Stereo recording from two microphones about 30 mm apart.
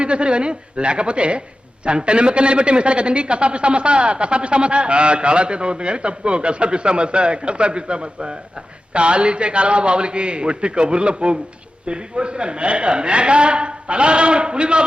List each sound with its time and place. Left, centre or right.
0.0 s a man's voice: right